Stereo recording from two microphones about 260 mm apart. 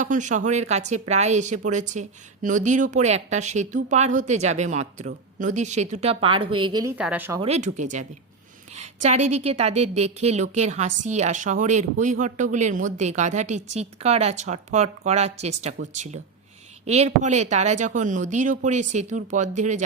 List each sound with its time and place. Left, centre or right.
0.0 s speech: right; by 7.4 s centre
7.4 s speech: right
9.3 s speech: right
16.8 s speech: right